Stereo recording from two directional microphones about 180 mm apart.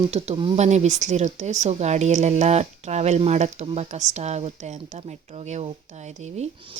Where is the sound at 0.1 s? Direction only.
30° right (ahead or behind).